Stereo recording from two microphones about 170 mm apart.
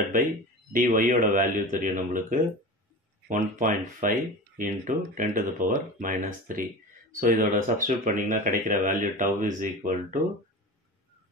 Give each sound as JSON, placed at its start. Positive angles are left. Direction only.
{"t": 0.7, "sound": "speech", "side_deg": -50}